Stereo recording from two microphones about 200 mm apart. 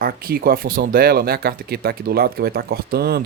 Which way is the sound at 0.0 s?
45° right (ahead or behind).